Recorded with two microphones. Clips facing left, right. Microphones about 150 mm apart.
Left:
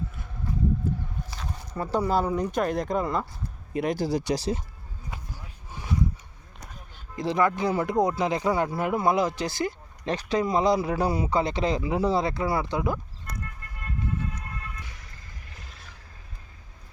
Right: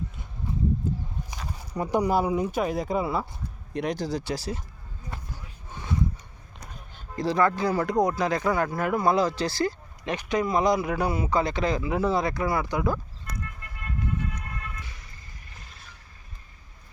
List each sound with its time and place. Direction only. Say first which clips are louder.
0.8 s a sound: left 1 dB; 20° right (ahead or behind)
1.3 s speech: even; 15° right (ahead or behind); by 4.6 s 20° left (ahead or behind)
7.2 s speech: right 1 dB; 20° left (ahead or behind)
10.1 s speech: left 1 dB; 35° left (ahead or behind)